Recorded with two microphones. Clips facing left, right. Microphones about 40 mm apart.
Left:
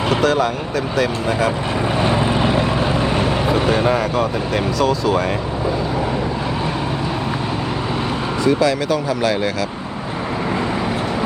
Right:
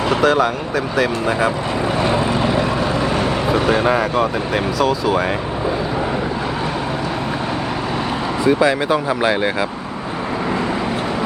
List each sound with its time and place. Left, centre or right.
0.1 s speech: centre
2.0 s vehicle: left
3.5 s speech: centre
8.4 s speech: right